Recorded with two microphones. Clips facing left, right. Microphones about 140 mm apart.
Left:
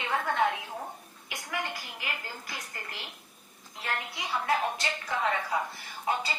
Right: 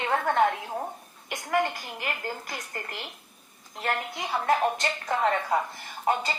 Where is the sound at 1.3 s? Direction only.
50° right (ahead or behind).